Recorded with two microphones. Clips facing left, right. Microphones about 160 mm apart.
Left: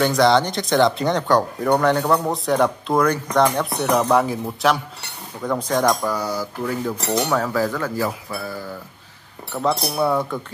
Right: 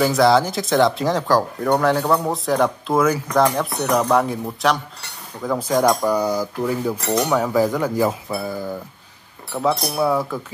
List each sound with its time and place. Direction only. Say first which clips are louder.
0.0 s speech: right 1 dB; 5° right (ahead or behind)
9.5 s speech: right 1 dB; 5° right (ahead or behind)